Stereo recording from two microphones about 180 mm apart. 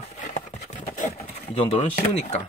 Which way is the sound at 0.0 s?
40° left (ahead or behind).